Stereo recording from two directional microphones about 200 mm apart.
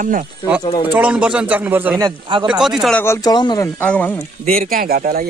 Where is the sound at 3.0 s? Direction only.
15° left (ahead or behind).